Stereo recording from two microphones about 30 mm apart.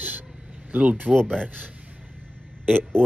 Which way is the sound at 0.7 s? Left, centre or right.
Right.